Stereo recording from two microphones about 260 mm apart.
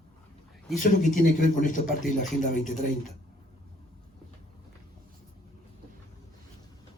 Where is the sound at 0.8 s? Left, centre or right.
Left.